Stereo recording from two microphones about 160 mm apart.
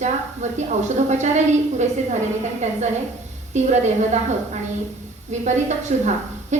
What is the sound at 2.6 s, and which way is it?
A woman's voice, 45° right (ahead or behind).